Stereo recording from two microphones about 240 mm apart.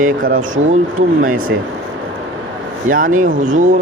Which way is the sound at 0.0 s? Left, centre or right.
Right.